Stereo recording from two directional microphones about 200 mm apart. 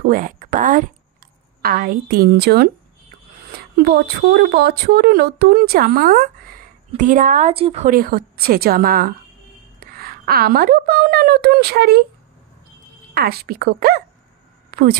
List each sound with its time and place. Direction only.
0.0 s a woman's voice: 45° right (ahead or behind)
7.9 s a woman's voice: 45° right (ahead or behind)
13.1 s speech: 50° right (ahead or behind)
14.7 s a sound: 50° right (ahead or behind)